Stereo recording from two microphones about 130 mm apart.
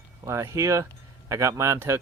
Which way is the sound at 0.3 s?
20° right (ahead or behind).